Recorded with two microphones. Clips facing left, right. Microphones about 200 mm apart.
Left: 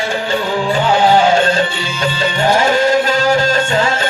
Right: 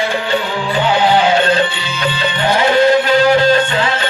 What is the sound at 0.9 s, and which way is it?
Music, 45° left (ahead or behind).